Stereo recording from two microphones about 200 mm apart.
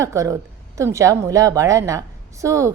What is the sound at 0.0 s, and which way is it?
A woman's voice, 15° right (ahead or behind).